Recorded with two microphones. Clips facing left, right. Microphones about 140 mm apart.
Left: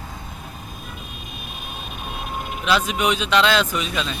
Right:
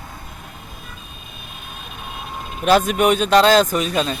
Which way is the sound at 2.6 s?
50° right (ahead or behind).